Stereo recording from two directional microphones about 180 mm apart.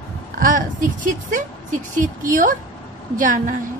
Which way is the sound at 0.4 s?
45° right (ahead or behind).